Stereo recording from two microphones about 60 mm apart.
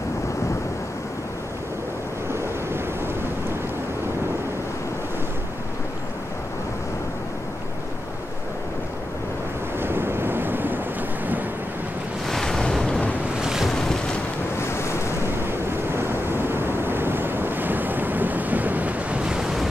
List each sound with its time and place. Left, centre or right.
9.8 s waves: right
12.3 s waves: centre
13.4 s boat: centre
13.7 s boat: centre
14.6 s waves: left
15.2 s waves: right; by 19.7 s centre